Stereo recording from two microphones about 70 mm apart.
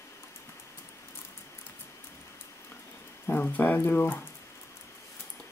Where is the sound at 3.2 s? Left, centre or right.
Left.